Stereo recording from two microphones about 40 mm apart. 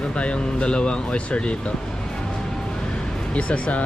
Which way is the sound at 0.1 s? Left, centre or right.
Left.